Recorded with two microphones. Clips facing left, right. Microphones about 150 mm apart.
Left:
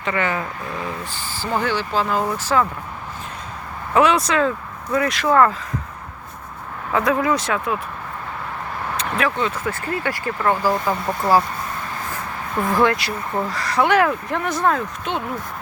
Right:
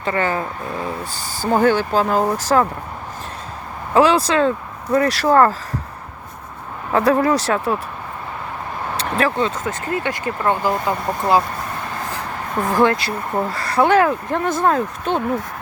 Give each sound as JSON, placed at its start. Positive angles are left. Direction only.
{"t": 0.0, "sound": "speech", "side_deg": -35}
{"t": 3.9, "sound": "speech", "side_deg": -30}
{"t": 6.9, "sound": "speech", "side_deg": -35}
{"t": 9.0, "sound": "speech", "side_deg": -35}
{"t": 9.6, "sound": "speech", "side_deg": -20}
{"t": 12.6, "sound": "speech", "side_deg": -25}
{"t": 14.7, "sound": "speech", "side_deg": -40}